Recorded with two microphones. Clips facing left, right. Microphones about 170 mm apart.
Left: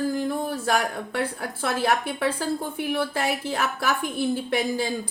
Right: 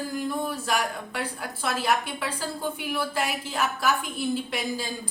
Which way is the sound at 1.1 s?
55° left (ahead or behind).